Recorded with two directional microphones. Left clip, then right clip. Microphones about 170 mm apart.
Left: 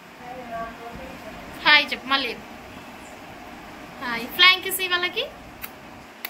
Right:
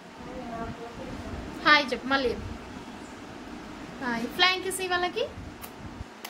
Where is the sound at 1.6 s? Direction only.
40° right (ahead or behind).